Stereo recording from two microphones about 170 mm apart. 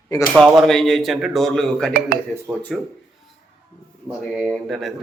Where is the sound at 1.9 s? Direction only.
65° right (ahead or behind).